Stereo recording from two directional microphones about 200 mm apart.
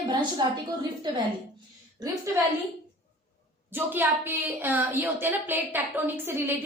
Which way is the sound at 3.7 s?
10° right (ahead or behind).